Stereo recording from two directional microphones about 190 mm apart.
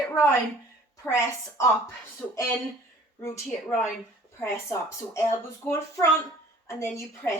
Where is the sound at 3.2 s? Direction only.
15° left (ahead or behind).